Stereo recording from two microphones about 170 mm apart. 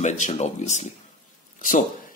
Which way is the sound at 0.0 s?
45° left (ahead or behind).